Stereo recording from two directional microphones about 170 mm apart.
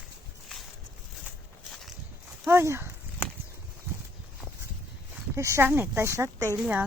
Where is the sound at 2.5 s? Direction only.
15° right (ahead or behind).